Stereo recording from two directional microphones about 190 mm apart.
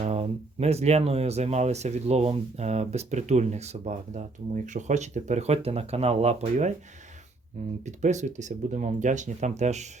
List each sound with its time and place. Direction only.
0.0 s speech: 35° right (ahead or behind)
7.9 s speech: 40° right (ahead or behind)